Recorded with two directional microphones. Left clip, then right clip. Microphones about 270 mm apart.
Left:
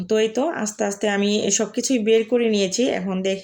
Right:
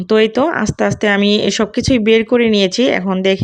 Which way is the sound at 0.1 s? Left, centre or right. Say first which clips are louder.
Right 8 dB; right.